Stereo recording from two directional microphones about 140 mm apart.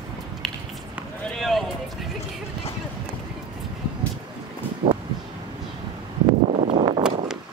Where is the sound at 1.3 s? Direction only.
Centre (ahead or behind).